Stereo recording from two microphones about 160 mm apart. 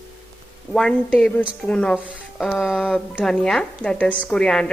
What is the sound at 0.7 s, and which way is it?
A woman's voice, 5° left (ahead or behind).